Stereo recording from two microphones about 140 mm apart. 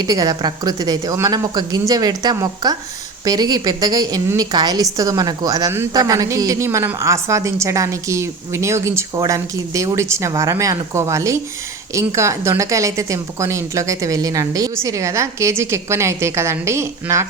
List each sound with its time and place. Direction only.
0.0 s a woman's voice: 25° right (ahead or behind)